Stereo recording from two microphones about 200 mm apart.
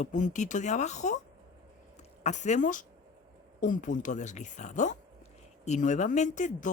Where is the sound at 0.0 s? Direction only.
40° left (ahead or behind).